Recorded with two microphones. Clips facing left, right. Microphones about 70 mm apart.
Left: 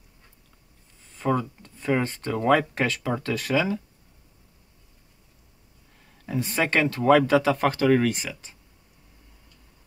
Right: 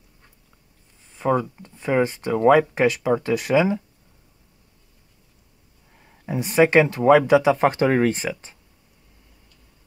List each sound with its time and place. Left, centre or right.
1.1 s speech: centre
6.2 s speech: centre
7.6 s speech: right